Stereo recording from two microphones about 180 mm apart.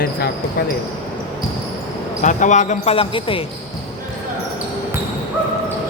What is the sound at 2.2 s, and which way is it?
Speech, 45° left (ahead or behind).